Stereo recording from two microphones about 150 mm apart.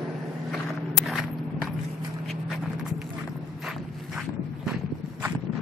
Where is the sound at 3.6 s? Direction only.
Centre (ahead or behind).